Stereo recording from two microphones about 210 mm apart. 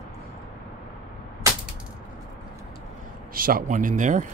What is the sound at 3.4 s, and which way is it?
Speech, 45° right (ahead or behind).